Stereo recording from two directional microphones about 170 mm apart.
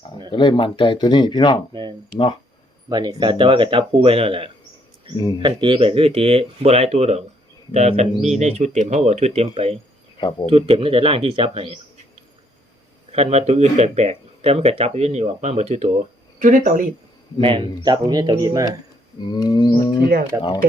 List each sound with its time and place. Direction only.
0.3 s speech: 25° left (ahead or behind)
2.9 s speech: 25° right (ahead or behind)
10.2 s speech: 25° left (ahead or behind)
10.5 s speech: 35° right (ahead or behind)
13.1 s speech: 40° right (ahead or behind)
17.4 s speech: 30° right (ahead or behind)
19.2 s speech: 25° left (ahead or behind)
20.3 s speech: 15° right (ahead or behind)